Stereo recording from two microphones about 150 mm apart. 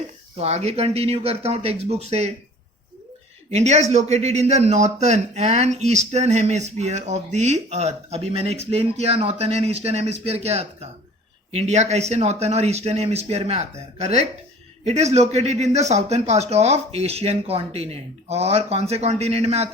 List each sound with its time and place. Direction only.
0.3 s speech: 45° right (ahead or behind)
3.5 s speech: 50° right (ahead or behind)